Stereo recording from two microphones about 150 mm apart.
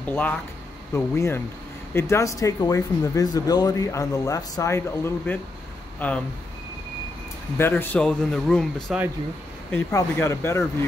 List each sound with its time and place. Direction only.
0.0 s speech: 10° left (ahead or behind)
7.5 s speech: 15° left (ahead or behind)
9.7 s speech: 15° left (ahead or behind)